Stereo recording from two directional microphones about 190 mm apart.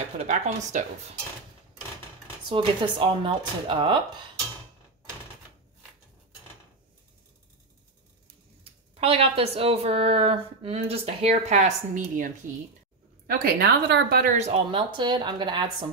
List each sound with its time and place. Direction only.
0.3 s speech: 40° right (ahead or behind)
2.5 s speech: 25° right (ahead or behind)
9.0 s speech: 30° right (ahead or behind)
13.3 s a woman's voice: 55° right (ahead or behind)
14.3 s speech: 35° right (ahead or behind)